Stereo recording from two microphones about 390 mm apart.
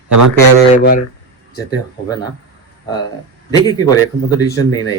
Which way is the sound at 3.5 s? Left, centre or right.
Centre.